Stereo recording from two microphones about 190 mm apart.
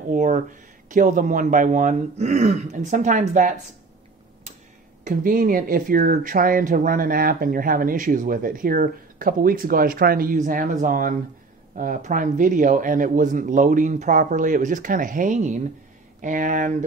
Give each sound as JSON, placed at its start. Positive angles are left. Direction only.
{"t": 0.1, "sound": "speech", "side_deg": -40}
{"t": 5.0, "sound": "speech", "side_deg": -45}